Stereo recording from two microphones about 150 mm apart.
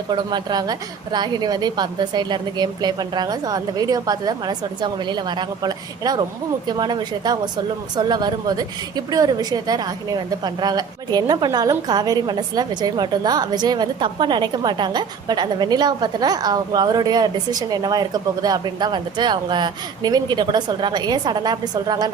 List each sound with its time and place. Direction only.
0.1 s speech: 30° right (ahead or behind)